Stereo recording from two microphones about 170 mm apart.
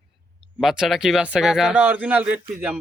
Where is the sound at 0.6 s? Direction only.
5° right (ahead or behind).